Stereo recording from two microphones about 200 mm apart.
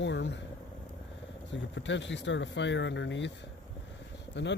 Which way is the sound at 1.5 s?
65° left (ahead or behind).